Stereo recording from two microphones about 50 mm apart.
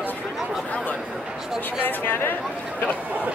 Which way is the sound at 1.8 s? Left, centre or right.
Left.